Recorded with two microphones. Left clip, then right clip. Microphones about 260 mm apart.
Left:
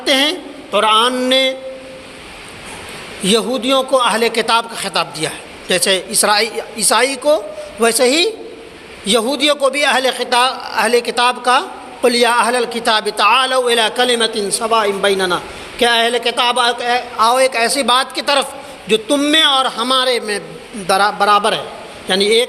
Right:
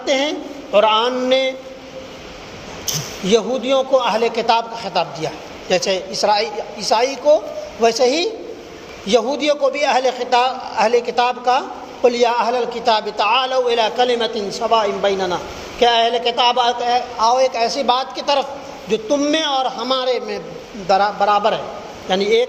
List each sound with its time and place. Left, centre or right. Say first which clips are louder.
0.0 s a man's voice: left 4 dB; left
3.2 s a man's voice: left 2 dB; left